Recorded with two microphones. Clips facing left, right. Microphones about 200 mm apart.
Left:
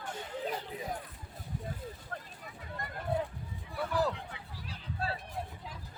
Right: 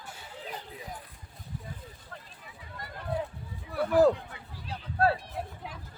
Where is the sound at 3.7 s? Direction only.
50° right (ahead or behind); by 5.5 s 70° right (ahead or behind).